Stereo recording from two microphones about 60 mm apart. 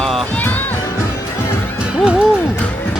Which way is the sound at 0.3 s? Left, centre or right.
Left.